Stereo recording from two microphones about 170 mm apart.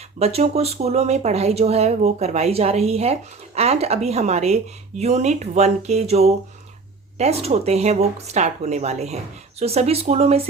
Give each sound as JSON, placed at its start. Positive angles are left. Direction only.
{"t": 0.2, "sound": "speech", "side_deg": -40}